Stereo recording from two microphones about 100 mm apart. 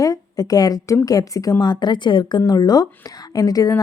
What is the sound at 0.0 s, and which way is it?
A woman's voice, 35° left (ahead or behind).